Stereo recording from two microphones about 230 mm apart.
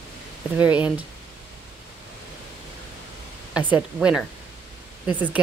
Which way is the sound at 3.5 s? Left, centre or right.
Centre.